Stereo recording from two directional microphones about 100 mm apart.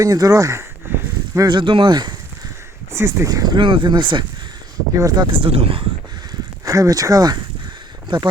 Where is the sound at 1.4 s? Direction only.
50° right (ahead or behind).